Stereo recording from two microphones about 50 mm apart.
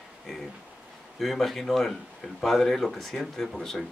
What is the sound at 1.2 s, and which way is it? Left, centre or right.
Speech, centre.